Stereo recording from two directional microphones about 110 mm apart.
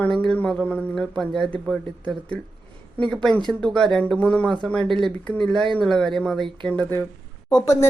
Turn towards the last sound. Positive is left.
turn(degrees=35)  # may be behind; listen again after turning